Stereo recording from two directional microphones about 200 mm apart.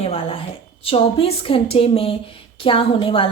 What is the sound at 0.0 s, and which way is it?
A woman's voice, 30° left (ahead or behind).